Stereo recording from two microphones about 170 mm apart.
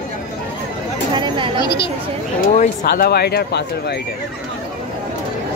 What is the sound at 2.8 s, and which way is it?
Speech, 70° left (ahead or behind).